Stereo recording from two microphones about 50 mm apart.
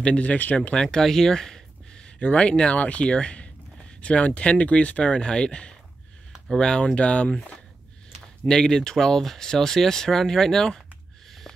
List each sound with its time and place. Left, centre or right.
0.0 s speech: left
0.6 s speech: centre
2.1 s speech: left
8.5 s speech: centre